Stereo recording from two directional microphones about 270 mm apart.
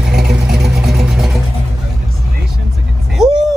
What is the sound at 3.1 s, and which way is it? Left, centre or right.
Vehicle, centre.